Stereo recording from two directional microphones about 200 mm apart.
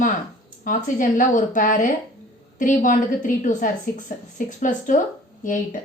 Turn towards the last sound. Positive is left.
turn(degrees=40)  # may be behind; listen again after turning